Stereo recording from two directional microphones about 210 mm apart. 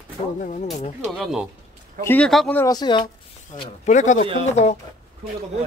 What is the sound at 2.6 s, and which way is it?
Speech, 20° left (ahead or behind).